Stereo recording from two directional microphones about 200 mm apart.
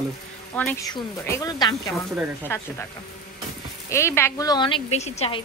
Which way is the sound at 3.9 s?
15° left (ahead or behind).